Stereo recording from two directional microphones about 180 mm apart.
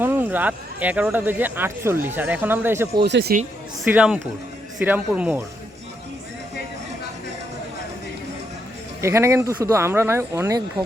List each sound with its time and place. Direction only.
0.0 s speech: 10° right (ahead or behind)
2.9 s speech: 70° right (ahead or behind)
3.8 s speech: 5° right (ahead or behind)
9.0 s speech: 15° right (ahead or behind)